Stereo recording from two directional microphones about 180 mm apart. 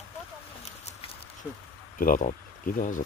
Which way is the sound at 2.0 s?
50° left (ahead or behind).